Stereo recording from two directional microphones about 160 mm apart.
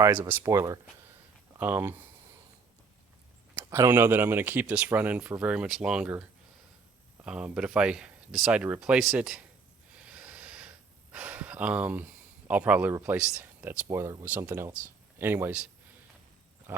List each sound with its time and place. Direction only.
0.0 s speech: 15° right (ahead or behind)
3.7 s speech: 15° right (ahead or behind)
7.3 s speech: 5° right (ahead or behind)
10.0 s gasp: 10° right (ahead or behind)
15.2 s speech: 15° right (ahead or behind)
16.7 s pig: 15° right (ahead or behind)